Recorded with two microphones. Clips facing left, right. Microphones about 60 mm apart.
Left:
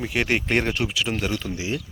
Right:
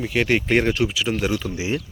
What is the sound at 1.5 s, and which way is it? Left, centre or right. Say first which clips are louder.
Speech: right 3 dB; right.